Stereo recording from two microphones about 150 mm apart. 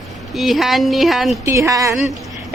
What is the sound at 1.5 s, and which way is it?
Speech, 20° right (ahead or behind).